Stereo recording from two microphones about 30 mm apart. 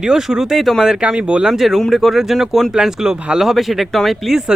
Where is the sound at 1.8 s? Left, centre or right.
Centre.